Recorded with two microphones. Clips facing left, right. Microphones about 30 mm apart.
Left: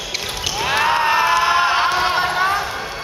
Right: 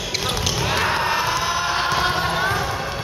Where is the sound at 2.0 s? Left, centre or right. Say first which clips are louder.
Left 3 dB; left.